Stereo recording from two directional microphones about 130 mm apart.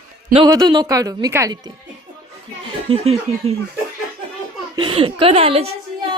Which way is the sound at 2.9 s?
50° right (ahead or behind).